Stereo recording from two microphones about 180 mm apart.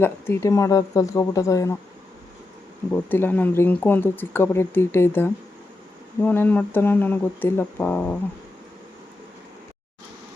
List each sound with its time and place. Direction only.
0.0 s speech: 15° left (ahead or behind)
2.9 s speech: 10° left (ahead or behind)